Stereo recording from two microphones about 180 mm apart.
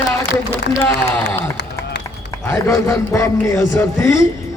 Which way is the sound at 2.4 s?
15° left (ahead or behind).